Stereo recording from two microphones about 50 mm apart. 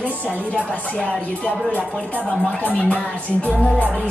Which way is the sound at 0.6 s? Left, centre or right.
Left.